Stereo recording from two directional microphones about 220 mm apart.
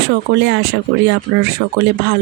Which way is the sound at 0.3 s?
50° right (ahead or behind).